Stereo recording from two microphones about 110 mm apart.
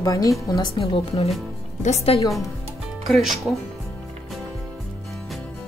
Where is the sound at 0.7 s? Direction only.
60° left (ahead or behind).